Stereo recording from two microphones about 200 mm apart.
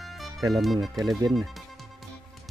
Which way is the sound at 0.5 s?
Centre (ahead or behind).